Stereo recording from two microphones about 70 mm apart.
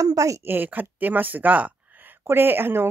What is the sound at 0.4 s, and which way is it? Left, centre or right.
A woman's voice, right.